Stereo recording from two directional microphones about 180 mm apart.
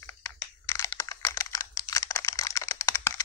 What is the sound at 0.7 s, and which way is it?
Computer keyboard, 15° left (ahead or behind).